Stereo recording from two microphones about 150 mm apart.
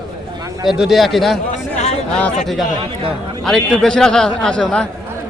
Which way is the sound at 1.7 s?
50° left (ahead or behind).